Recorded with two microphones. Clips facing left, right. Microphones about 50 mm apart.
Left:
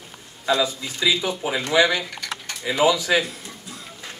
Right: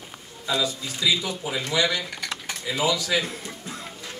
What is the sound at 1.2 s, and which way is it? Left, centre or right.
Speech, left.